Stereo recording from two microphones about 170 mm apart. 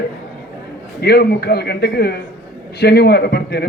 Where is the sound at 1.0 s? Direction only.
70° left (ahead or behind).